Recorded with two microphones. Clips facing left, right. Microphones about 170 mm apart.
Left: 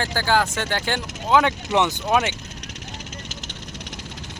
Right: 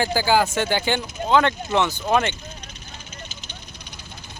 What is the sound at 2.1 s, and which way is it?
Speech, 5° left (ahead or behind).